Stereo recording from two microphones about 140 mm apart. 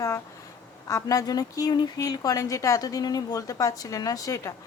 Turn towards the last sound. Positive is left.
turn(degrees=25)  # may be behind; listen again after turning